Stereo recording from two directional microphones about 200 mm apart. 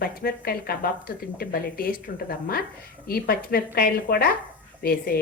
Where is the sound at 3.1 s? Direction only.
50° left (ahead or behind).